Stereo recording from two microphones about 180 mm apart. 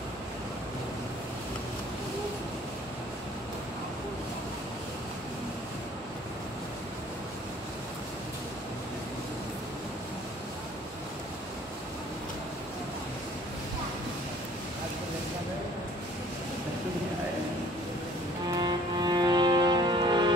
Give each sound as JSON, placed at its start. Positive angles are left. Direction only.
{"t": 18.5, "sound": "music", "side_deg": -25}